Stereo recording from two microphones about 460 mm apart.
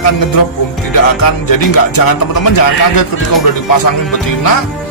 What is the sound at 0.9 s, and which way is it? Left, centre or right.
Speech, left.